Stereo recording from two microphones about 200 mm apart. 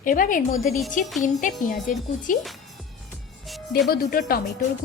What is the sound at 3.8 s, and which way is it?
Speech, 45° left (ahead or behind).